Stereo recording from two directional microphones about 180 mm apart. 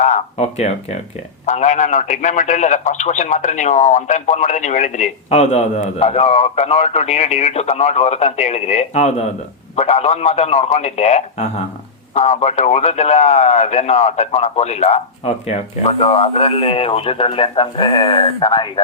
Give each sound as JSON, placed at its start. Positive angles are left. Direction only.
{"t": 0.0, "sound": "a man's voice", "side_deg": 40}